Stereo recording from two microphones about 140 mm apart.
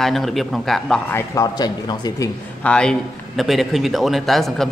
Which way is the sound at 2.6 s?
5° left (ahead or behind).